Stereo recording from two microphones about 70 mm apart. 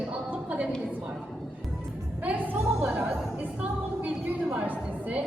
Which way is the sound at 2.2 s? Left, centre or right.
Right.